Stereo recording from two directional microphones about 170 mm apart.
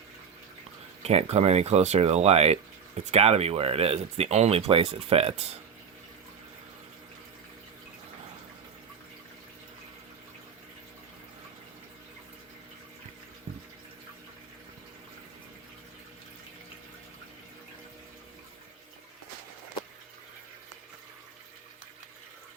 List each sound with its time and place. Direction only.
1.0 s speech: 40° right (ahead or behind)